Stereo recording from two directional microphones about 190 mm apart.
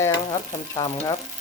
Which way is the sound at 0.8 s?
20° left (ahead or behind).